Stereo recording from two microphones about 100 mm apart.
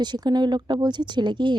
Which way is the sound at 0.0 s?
45° right (ahead or behind).